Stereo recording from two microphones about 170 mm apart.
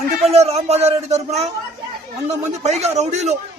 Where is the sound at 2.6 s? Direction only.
40° right (ahead or behind).